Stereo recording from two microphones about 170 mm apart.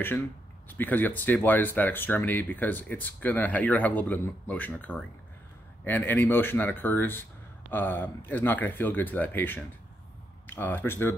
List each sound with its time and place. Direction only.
0.7 s speech: 10° left (ahead or behind)